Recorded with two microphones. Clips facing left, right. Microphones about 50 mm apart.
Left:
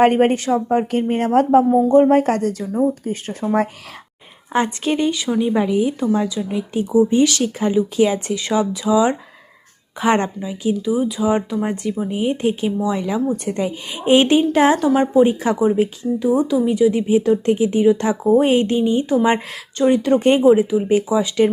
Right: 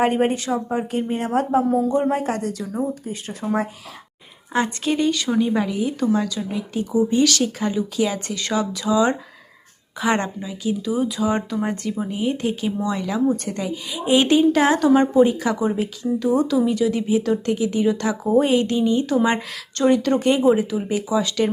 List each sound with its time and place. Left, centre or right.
0.0 s a woman's voice: left
2.1 s a woman's voice: left
4.5 s a woman's voice: left
5.1 s speech: centre
5.5 s speech: centre
10.0 s a woman's voice: left
10.2 s a woman's voice: centre
12.8 s a woman's voice: centre
14.8 s speech: centre
15.3 s a woman's voice: left
15.5 s a woman's voice: centre
17.1 s a woman's voice: left